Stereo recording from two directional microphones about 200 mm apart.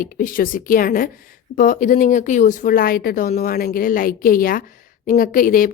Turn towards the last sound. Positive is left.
turn(degrees=45)  # may be behind; listen again after turning